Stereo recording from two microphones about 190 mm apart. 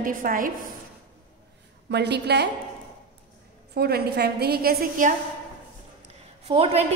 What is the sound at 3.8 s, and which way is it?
A woman's voice, 55° right (ahead or behind).